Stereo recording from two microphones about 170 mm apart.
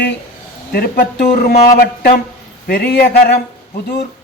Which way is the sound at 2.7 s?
70° left (ahead or behind).